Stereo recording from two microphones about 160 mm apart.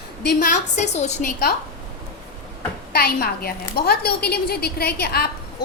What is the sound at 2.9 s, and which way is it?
A woman's voice, 75° left (ahead or behind).